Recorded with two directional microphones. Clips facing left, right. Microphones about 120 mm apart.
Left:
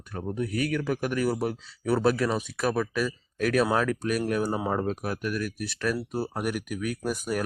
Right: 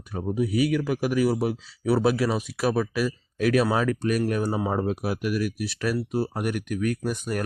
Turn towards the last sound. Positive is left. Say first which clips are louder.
# right 1 dB
turn(degrees=0)  # may be behind; listen again after turning